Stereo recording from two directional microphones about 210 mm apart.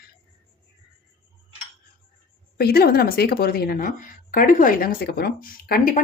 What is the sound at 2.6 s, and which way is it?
A woman's voice, 50° left (ahead or behind).